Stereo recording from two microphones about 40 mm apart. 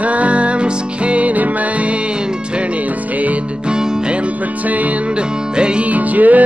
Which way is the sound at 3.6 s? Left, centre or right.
Right.